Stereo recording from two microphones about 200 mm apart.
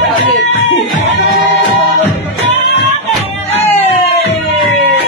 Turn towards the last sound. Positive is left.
turn(degrees=30)  # may be behind; listen again after turning